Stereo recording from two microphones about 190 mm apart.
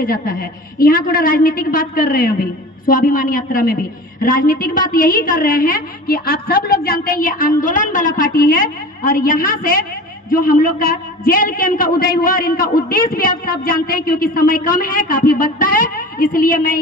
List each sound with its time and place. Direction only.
0.0 s a woman's voice: 50° left (ahead or behind)